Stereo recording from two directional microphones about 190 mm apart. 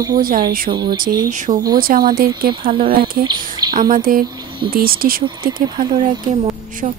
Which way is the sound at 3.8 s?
50° right (ahead or behind).